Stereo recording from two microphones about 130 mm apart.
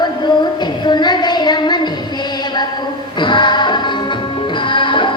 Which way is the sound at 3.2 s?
35° left (ahead or behind).